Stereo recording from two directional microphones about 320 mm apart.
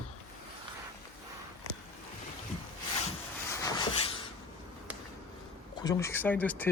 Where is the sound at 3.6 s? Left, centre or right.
Centre.